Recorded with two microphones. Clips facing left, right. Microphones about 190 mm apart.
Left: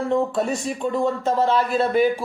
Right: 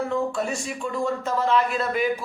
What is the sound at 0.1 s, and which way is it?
A man's voice, 35° left (ahead or behind).